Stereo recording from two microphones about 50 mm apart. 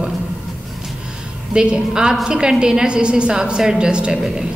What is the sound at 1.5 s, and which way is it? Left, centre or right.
A woman's voice, centre.